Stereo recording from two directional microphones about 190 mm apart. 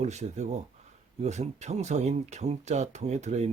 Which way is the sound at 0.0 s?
35° right (ahead or behind).